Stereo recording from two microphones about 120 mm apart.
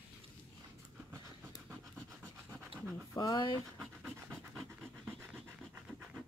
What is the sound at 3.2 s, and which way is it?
Speech, 35° left (ahead or behind).